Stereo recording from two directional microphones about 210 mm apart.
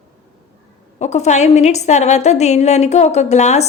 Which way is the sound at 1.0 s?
35° left (ahead or behind).